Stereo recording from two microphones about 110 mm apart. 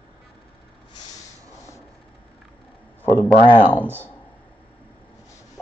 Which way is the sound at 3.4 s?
50° left (ahead or behind).